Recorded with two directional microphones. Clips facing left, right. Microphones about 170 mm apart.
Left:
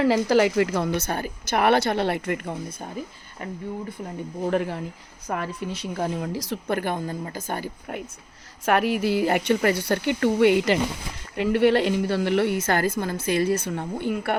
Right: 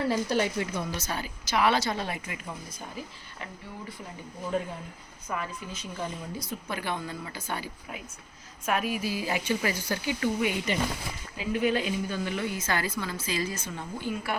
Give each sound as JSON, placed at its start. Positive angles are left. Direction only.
{"t": 0.0, "sound": "a woman's voice", "side_deg": 90}
{"t": 4.4, "sound": "speech", "side_deg": 80}
{"t": 5.3, "sound": "a woman's voice", "side_deg": 65}
{"t": 8.6, "sound": "a woman's voice", "side_deg": 70}